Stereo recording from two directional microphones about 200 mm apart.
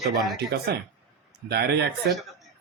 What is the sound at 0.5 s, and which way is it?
A man's voice, 50° right (ahead or behind).